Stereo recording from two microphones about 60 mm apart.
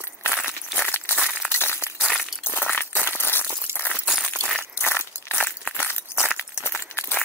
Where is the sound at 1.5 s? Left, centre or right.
Left.